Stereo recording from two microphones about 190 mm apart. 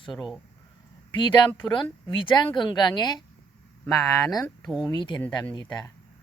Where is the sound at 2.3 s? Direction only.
25° left (ahead or behind).